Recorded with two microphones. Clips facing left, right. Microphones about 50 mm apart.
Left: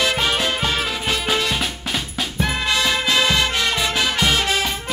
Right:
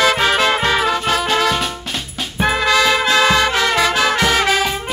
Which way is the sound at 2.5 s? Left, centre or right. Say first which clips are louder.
Right 8 dB; right.